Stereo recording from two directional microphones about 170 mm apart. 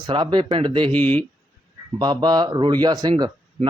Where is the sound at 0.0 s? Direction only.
25° right (ahead or behind).